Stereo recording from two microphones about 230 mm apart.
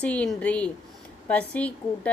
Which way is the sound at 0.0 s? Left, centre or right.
Centre.